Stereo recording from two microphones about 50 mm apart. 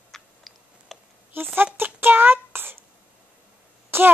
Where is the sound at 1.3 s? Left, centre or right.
Right.